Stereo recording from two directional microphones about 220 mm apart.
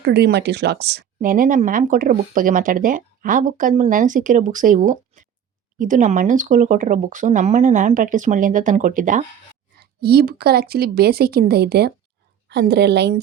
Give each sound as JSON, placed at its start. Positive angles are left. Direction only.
{"t": 0.0, "sound": "speech", "side_deg": -50}